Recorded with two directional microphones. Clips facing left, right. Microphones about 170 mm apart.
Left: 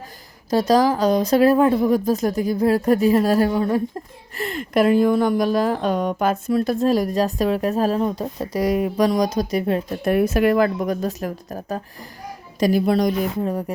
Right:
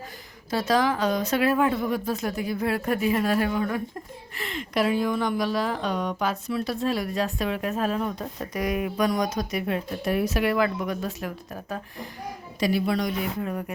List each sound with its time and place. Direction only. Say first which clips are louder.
0.5 s a woman's voice: left 6 dB; 40° left (ahead or behind)
10.0 s a woman's voice: left 7 dB; 55° left (ahead or behind); by 13.7 s 35° left (ahead or behind)